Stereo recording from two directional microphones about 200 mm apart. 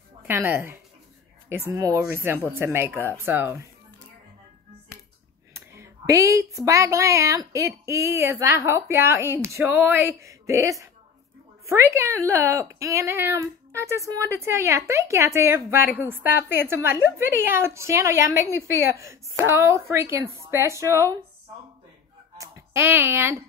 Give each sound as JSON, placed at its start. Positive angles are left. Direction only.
{"t": 0.3, "sound": "speech", "side_deg": -10}
{"t": 5.5, "sound": "speech", "side_deg": -15}
{"t": 22.4, "sound": "speech", "side_deg": -15}